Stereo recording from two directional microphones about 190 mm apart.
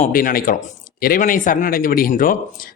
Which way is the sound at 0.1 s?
50° left (ahead or behind).